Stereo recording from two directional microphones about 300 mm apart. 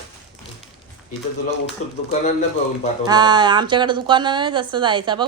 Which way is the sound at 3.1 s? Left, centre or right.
Centre.